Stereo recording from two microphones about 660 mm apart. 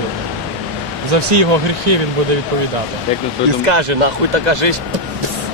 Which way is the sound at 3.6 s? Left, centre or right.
Right.